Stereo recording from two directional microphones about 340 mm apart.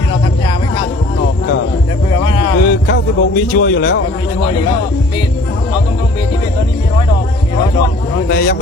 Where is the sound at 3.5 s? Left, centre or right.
Left.